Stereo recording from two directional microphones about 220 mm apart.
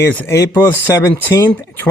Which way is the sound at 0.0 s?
10° left (ahead or behind).